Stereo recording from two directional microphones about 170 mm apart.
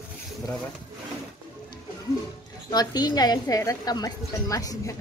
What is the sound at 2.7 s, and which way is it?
Speech, 25° left (ahead or behind).